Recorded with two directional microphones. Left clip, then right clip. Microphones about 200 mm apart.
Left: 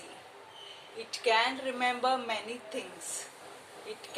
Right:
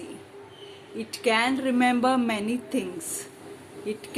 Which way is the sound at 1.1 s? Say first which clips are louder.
Right 4 dB; 50° right (ahead or behind).